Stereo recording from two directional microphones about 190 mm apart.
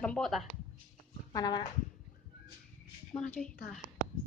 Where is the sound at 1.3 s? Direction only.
20° left (ahead or behind).